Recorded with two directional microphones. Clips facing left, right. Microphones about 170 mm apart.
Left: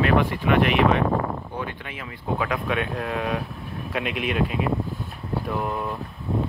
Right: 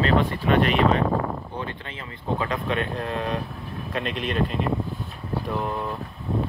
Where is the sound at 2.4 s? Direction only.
5° left (ahead or behind).